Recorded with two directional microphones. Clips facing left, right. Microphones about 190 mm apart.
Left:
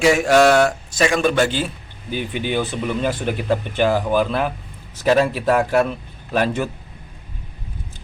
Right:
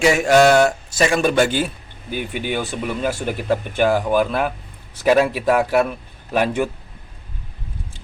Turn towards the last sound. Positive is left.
turn(degrees=-15)  # may be behind; listen again after turning